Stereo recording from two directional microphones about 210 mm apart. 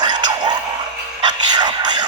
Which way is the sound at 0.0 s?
20° right (ahead or behind).